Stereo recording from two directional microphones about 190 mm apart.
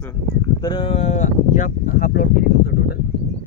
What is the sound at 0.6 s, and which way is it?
Speech, 25° left (ahead or behind).